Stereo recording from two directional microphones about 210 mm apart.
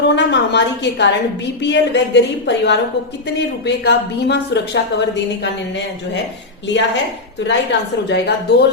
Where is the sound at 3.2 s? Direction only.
55° left (ahead or behind).